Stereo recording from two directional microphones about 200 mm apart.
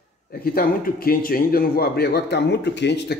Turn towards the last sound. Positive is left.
turn(degrees=60)  # may be behind; listen again after turning